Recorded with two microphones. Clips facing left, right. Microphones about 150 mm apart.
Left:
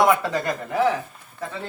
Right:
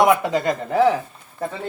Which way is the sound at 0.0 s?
15° right (ahead or behind).